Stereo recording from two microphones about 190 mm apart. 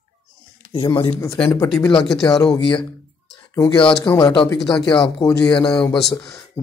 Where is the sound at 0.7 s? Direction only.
25° left (ahead or behind).